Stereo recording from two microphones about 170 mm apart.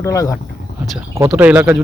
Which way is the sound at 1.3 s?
10° right (ahead or behind).